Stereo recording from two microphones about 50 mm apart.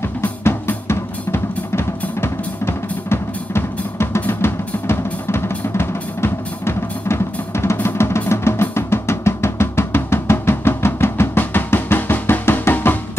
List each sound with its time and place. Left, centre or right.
0.4 s drum: left